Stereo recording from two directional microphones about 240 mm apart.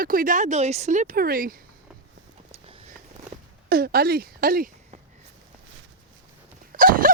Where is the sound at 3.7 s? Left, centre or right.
Right.